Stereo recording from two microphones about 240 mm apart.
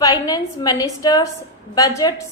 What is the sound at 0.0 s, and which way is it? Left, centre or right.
A woman's voice, centre.